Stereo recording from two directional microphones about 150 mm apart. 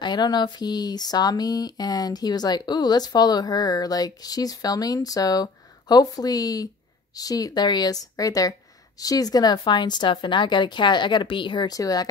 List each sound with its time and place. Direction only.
0.0 s speech: 30° left (ahead or behind)